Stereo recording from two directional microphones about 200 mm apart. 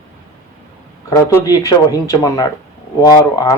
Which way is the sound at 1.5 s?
20° left (ahead or behind).